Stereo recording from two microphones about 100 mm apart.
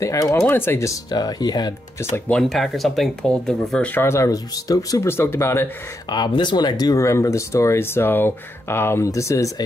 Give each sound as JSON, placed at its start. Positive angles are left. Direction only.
{"t": 0.0, "sound": "speech", "side_deg": 30}
{"t": 1.1, "sound": "speech", "side_deg": 45}
{"t": 2.2, "sound": "speech", "side_deg": 5}
{"t": 3.9, "sound": "speech", "side_deg": 25}
{"t": 5.1, "sound": "speech", "side_deg": 25}
{"t": 6.0, "sound": "speech", "side_deg": 50}